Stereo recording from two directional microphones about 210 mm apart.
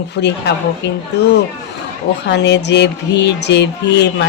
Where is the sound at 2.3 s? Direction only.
55° left (ahead or behind).